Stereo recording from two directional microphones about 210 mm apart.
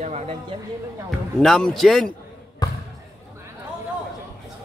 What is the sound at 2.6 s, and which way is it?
Basketball bounce, 20° left (ahead or behind).